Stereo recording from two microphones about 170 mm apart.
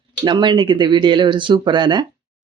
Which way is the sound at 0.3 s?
25° right (ahead or behind).